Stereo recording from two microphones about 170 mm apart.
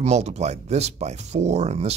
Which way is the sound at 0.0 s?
40° right (ahead or behind).